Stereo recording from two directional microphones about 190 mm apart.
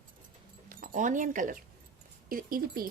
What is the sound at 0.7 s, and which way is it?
Speech, 45° right (ahead or behind).